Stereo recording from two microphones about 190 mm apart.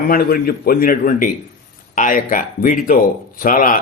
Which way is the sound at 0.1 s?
50° left (ahead or behind).